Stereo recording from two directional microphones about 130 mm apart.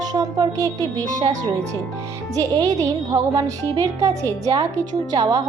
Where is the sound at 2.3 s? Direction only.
25° right (ahead or behind).